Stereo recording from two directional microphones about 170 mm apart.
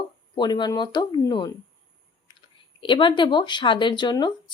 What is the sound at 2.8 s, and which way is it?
A woman's voice, 30° left (ahead or behind).